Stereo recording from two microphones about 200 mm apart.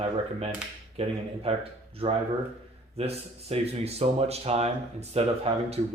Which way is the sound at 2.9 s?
30° right (ahead or behind).